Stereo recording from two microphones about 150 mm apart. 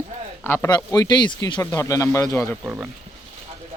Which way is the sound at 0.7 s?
25° left (ahead or behind).